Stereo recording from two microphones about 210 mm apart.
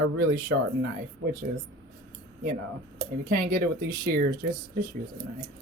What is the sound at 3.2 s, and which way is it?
Speech, 45° right (ahead or behind).